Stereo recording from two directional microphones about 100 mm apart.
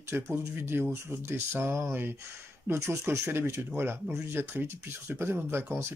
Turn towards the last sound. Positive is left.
turn(degrees=-20)  # may be behind; listen again after turning